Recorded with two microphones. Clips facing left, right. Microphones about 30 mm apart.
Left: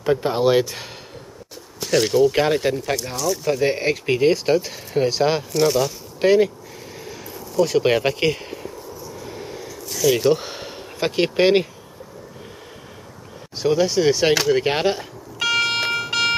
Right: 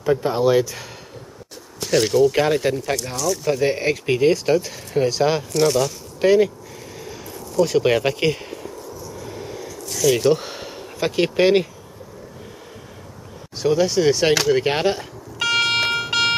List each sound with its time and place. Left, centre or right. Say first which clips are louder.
0.0 s speech: even; centre
1.8 s speech: even; centre
7.1 s a sound: even; centre
7.8 s speech: even; centre
9.0 s a sound: even; centre
13.6 s speech: even; centre
15.9 s music: right 1 dB; centre